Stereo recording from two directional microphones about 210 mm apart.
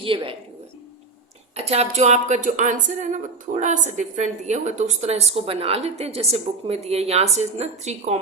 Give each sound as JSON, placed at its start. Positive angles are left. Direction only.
{"t": 0.0, "sound": "a woman's voice", "side_deg": -25}
{"t": 1.5, "sound": "speech", "side_deg": -30}